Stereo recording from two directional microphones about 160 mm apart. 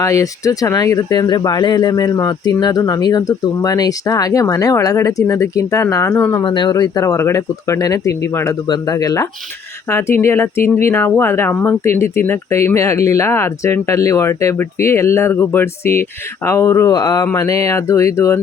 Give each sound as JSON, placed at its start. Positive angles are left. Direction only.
{"t": 0.0, "sound": "speech", "side_deg": 20}
{"t": 6.4, "sound": "speech", "side_deg": 30}